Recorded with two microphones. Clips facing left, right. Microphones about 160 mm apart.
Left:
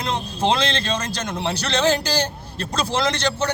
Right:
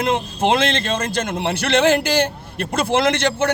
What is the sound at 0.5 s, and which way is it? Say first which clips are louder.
A man's voice: right 3 dB; 55° right (ahead or behind).